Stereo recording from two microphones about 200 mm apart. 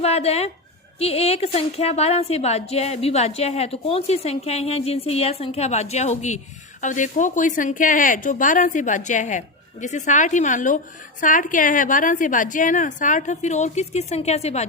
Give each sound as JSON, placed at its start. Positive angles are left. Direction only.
{"t": 0.0, "sound": "a woman's voice", "side_deg": 30}